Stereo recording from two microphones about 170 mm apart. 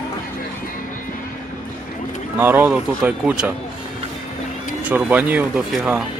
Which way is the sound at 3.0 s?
5° right (ahead or behind).